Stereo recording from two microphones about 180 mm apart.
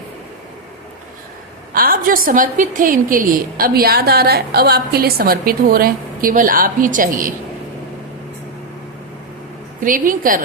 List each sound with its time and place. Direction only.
1.7 s a woman's voice: 55° right (ahead or behind)
9.8 s a woman's voice: 50° right (ahead or behind)